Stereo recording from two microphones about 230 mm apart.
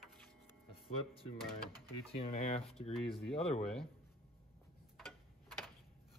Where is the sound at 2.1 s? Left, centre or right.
Left.